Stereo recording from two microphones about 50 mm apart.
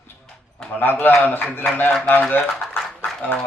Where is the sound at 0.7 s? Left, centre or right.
Left.